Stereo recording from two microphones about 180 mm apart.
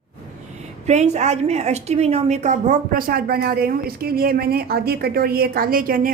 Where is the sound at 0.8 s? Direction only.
40° right (ahead or behind).